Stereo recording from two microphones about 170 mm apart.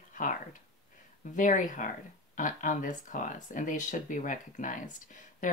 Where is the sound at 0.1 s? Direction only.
50° left (ahead or behind).